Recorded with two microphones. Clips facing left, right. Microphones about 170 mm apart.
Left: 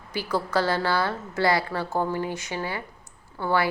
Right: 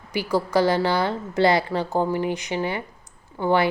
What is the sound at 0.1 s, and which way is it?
A woman's voice, 15° right (ahead or behind).